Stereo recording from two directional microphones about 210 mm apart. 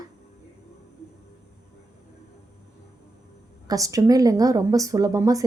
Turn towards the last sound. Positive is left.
turn(degrees=-15)  # may be behind; listen again after turning